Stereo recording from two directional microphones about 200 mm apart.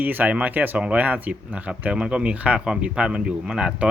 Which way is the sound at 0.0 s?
10° right (ahead or behind).